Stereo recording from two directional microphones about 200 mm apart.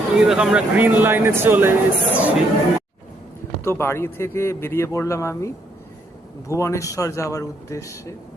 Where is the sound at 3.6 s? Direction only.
15° left (ahead or behind).